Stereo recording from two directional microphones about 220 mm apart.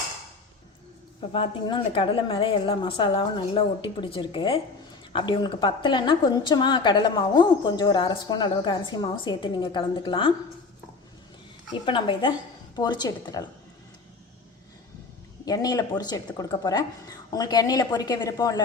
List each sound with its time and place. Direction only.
1.3 s a woman's voice: 20° left (ahead or behind)
11.7 s a woman's voice: 20° left (ahead or behind)
15.4 s speech: 15° left (ahead or behind)